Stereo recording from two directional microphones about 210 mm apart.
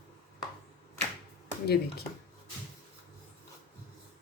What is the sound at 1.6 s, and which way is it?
Speech, 50° left (ahead or behind).